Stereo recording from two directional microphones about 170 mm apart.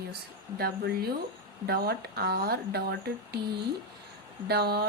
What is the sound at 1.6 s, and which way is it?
Speech, 65° right (ahead or behind).